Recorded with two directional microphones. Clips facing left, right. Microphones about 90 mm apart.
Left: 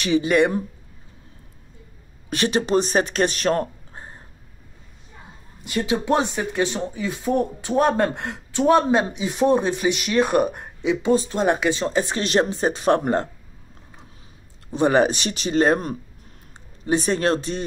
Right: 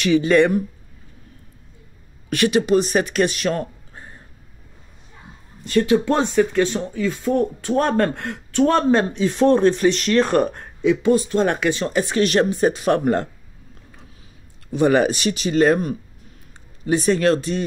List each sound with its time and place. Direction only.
0.0 s speech: 20° left (ahead or behind)
2.2 s speech: 25° left (ahead or behind)
5.6 s speech: 15° left (ahead or behind); by 13.3 s 30° left (ahead or behind)
14.7 s speech: 30° left (ahead or behind)